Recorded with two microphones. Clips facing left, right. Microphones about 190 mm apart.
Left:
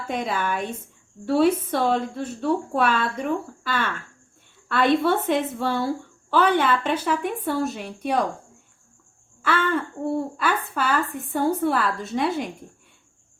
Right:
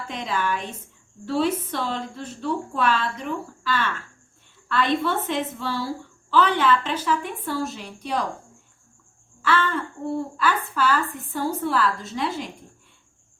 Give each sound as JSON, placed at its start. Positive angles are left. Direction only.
{"t": 0.1, "sound": "a woman's voice", "side_deg": 50}
{"t": 9.4, "sound": "a woman's voice", "side_deg": 55}